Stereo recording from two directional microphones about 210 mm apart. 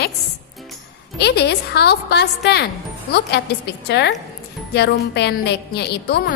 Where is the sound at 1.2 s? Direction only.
50° left (ahead or behind).